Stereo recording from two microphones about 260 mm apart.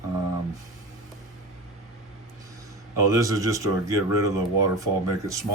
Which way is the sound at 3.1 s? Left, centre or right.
Centre.